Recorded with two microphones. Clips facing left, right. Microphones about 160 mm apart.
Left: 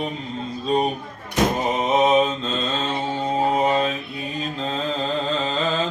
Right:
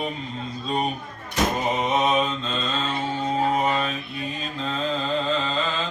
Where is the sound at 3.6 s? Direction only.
25° left (ahead or behind).